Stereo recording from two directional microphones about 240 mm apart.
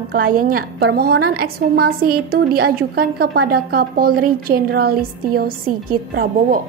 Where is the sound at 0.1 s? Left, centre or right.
Right.